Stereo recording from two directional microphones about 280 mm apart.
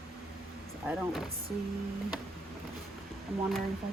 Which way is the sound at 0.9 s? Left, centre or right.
Centre.